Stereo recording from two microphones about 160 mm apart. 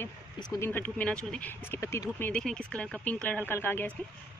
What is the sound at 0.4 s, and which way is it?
Speech, 25° left (ahead or behind).